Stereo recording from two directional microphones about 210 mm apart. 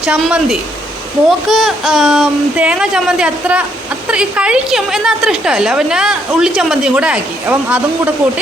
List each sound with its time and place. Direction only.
0.0 s a woman's voice: 5° right (ahead or behind)
1.5 s a woman's voice: centre (ahead or behind)